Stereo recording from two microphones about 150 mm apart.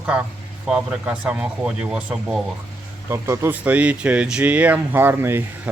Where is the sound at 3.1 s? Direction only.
15° right (ahead or behind).